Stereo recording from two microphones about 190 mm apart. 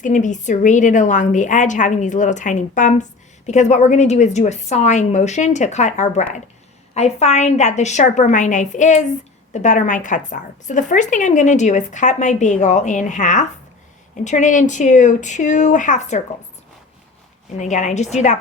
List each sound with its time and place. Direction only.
0.0 s a woman's voice: 40° left (ahead or behind)
17.6 s a woman's voice: 40° left (ahead or behind)